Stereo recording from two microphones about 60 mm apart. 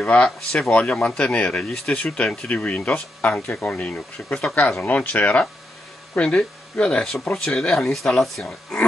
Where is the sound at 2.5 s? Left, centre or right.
Left.